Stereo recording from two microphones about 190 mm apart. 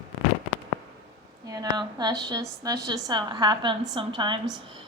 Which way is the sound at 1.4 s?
20° right (ahead or behind).